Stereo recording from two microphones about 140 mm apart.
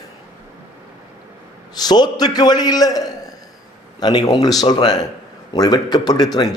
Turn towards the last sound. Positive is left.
turn(degrees=30)  # may be behind; listen again after turning